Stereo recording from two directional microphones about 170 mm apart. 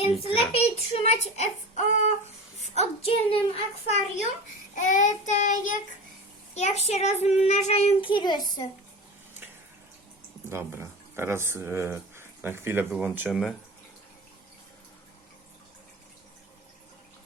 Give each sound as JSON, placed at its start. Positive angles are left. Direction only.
{"t": 0.0, "sound": "a child's voice", "side_deg": 35}
{"t": 4.7, "sound": "child singing", "side_deg": 50}
{"t": 6.5, "sound": "a child's voice", "side_deg": 40}
{"t": 10.5, "sound": "speech", "side_deg": -15}